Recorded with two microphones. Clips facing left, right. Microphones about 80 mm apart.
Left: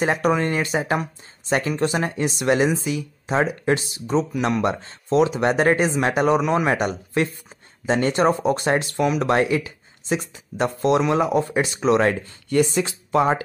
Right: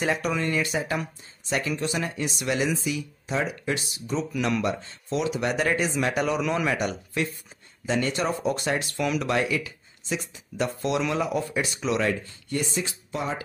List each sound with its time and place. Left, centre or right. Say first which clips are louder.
0.0 s speech: left 6 dB; left
12.4 s speech: left 9 dB; left